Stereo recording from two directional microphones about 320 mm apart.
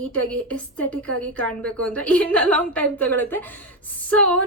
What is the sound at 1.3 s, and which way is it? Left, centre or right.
A woman's voice, centre.